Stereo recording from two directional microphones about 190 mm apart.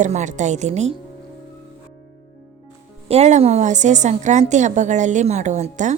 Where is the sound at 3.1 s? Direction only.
35° right (ahead or behind).